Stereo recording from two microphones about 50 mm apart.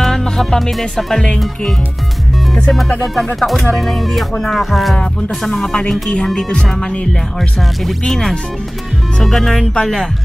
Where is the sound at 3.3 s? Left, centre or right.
Centre.